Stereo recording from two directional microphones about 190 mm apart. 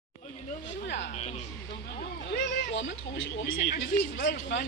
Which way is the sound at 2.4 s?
75° left (ahead or behind).